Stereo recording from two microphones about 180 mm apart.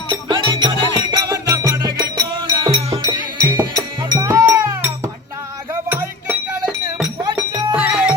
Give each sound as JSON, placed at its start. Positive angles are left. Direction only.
{"t": 0.1, "sound": "music", "side_deg": -25}